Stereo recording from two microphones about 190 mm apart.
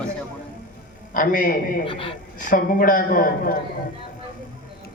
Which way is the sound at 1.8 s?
30° left (ahead or behind).